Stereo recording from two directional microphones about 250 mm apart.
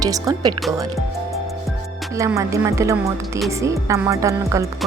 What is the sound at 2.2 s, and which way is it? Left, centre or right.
Speech, centre.